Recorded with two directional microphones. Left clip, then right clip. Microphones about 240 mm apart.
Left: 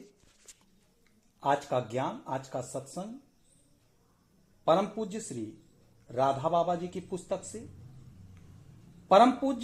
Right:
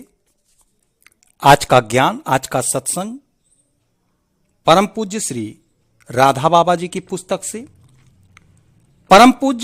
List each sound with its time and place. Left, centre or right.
1.4 s speech: right
4.6 s speech: right
9.0 s speech: right